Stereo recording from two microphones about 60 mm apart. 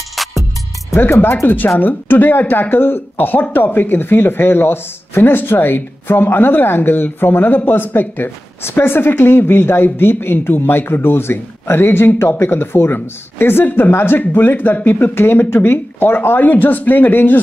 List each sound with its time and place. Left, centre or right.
0.1 s music: centre
1.2 s speech: left